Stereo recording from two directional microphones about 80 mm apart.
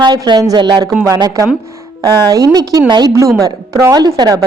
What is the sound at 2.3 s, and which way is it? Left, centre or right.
A woman's voice, right.